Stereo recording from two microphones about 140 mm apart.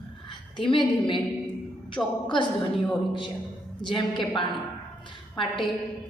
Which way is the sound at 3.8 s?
35° left (ahead or behind).